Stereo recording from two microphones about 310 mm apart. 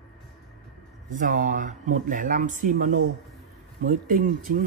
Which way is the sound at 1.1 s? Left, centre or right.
Right.